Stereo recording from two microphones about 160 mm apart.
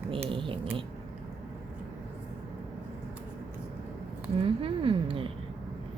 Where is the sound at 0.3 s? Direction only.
35° right (ahead or behind).